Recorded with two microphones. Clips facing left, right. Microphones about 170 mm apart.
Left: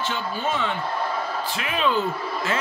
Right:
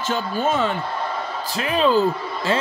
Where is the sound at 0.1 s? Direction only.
45° right (ahead or behind).